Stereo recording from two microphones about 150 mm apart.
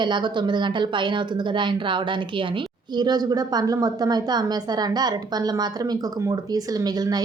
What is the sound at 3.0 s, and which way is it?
A woman's voice, 25° right (ahead or behind).